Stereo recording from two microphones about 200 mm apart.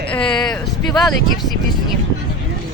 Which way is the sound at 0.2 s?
20° left (ahead or behind).